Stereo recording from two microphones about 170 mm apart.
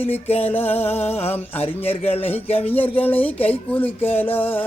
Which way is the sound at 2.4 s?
35° left (ahead or behind).